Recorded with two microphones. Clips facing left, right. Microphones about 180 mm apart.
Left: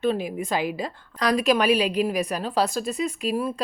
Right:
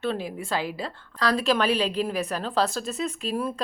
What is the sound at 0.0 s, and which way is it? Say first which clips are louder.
A woman's voice: left 4 dB; 15° left (ahead or behind).